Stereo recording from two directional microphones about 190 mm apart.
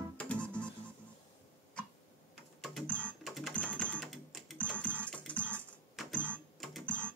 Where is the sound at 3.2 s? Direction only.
Centre (ahead or behind).